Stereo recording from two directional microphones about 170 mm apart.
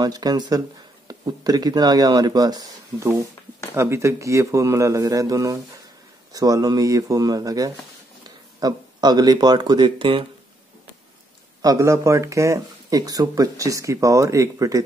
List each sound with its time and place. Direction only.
0.0 s a man's voice: 20° right (ahead or behind)
11.6 s speech: 20° right (ahead or behind)